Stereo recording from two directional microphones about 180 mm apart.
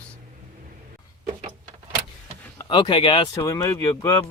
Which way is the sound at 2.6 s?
25° left (ahead or behind).